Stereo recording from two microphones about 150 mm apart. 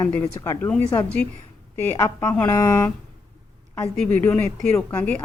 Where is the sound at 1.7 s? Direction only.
15° left (ahead or behind).